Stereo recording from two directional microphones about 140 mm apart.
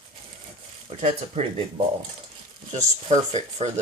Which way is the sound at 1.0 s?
50° right (ahead or behind).